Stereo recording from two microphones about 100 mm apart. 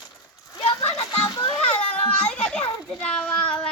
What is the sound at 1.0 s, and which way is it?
Children playing, 40° left (ahead or behind).